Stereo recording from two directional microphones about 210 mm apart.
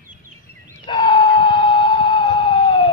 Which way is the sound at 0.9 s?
25° left (ahead or behind).